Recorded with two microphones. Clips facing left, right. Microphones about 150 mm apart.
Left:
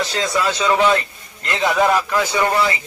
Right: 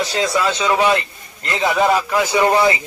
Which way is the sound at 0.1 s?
5° right (ahead or behind).